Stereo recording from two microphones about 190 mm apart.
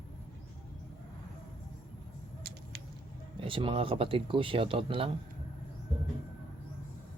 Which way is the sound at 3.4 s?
25° right (ahead or behind).